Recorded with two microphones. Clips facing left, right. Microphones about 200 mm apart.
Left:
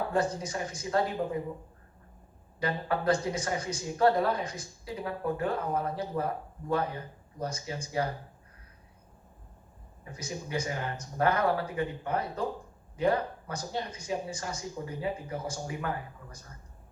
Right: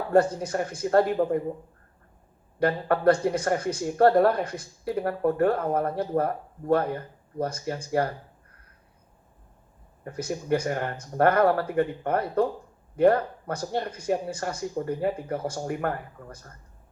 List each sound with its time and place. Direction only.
0.1 s speech: 55° right (ahead or behind)
2.6 s speech: 55° right (ahead or behind)
10.0 s speech: 60° right (ahead or behind)